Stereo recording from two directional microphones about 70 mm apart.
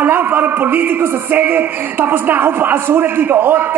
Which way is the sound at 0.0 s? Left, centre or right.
Right.